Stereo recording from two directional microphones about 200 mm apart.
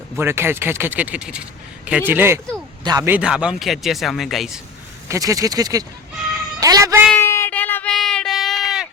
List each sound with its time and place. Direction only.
0.2 s speech: 10° right (ahead or behind)
5.0 s speech: 15° right (ahead or behind)
6.6 s meow: 15° right (ahead or behind)
7.1 s a sound: 10° left (ahead or behind)